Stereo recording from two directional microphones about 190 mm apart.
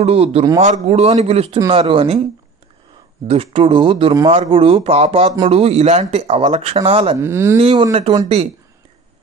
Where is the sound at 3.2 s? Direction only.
30° right (ahead or behind).